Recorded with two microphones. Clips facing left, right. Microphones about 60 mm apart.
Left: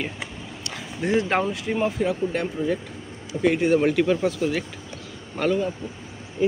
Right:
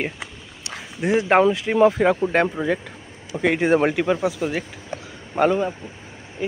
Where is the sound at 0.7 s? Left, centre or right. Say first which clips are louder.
Right 3 dB; centre.